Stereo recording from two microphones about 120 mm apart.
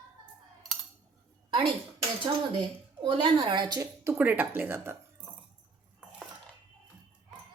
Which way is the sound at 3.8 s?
20° right (ahead or behind).